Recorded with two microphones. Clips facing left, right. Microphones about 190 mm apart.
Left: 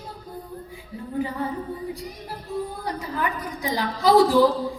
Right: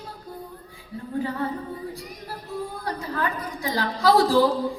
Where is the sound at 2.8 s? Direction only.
20° left (ahead or behind).